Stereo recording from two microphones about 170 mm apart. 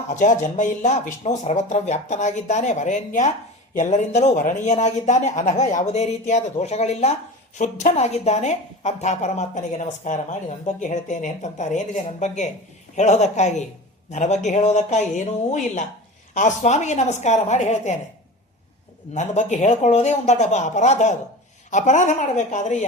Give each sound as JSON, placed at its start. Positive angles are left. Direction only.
{"t": 0.2, "sound": "speech", "side_deg": 45}
{"t": 19.1, "sound": "speech", "side_deg": 45}